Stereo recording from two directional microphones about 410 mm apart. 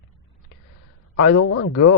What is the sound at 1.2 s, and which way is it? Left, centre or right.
Speech, left.